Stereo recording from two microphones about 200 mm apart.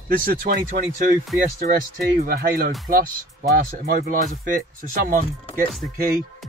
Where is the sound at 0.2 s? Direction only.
45° right (ahead or behind).